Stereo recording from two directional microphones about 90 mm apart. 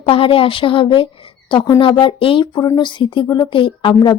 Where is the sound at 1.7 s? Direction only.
70° left (ahead or behind).